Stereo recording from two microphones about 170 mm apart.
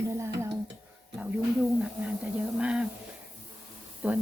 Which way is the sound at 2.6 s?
5° right (ahead or behind).